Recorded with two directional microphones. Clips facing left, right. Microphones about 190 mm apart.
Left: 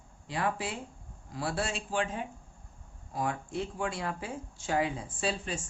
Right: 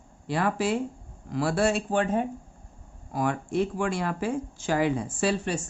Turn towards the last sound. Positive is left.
turn(degrees=-70)  # may be behind; listen again after turning